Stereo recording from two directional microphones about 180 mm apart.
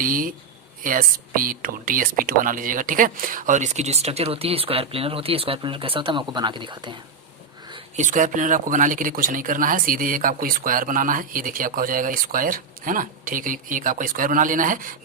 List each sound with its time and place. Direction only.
0.0 s speech: 50° right (ahead or behind); by 6.9 s 25° right (ahead or behind)
7.9 s speech: 45° right (ahead or behind)